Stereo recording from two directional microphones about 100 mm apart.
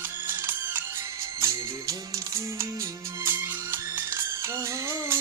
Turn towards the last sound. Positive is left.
turn(degrees=-25)  # may be behind; listen again after turning